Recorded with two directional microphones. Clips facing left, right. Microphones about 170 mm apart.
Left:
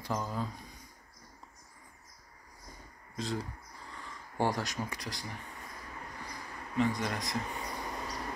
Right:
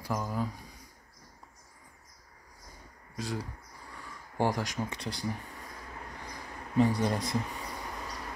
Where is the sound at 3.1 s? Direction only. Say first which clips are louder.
Even; 10° right (ahead or behind).